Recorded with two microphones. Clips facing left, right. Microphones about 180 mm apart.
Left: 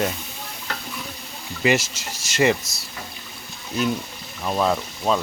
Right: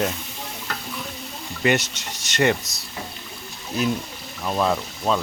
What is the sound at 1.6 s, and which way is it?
Speech, centre (ahead or behind).